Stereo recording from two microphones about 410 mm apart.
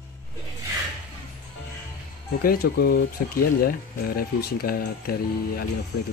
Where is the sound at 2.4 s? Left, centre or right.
Left.